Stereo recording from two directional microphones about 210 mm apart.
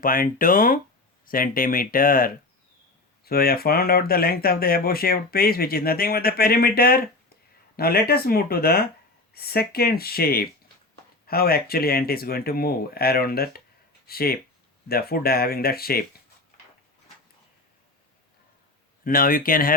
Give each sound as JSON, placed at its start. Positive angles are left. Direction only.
{"t": 0.0, "sound": "speech", "side_deg": 40}
{"t": 19.0, "sound": "speech", "side_deg": 40}